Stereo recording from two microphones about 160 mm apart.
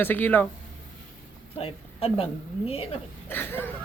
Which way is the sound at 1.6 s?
40° left (ahead or behind).